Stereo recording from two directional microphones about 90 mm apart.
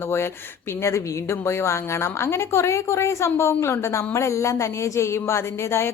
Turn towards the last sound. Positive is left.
turn(degrees=30)  # may be behind; listen again after turning